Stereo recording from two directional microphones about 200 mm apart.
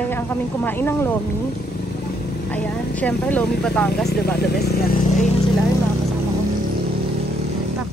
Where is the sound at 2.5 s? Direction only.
5° left (ahead or behind).